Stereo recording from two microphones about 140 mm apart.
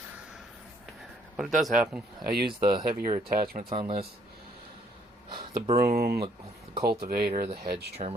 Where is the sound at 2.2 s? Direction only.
90° right.